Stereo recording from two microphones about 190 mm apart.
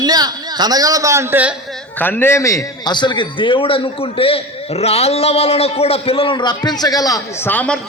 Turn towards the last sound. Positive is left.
turn(degrees=10)  # may be behind; listen again after turning